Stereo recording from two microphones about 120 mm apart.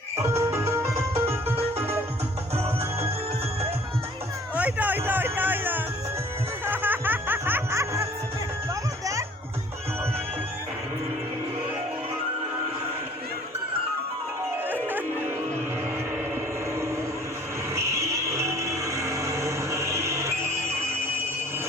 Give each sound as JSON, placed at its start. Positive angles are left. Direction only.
{"t": 0.2, "sound": "music", "side_deg": -25}
{"t": 4.5, "sound": "music", "side_deg": -15}
{"t": 17.7, "sound": "vehicle", "side_deg": -25}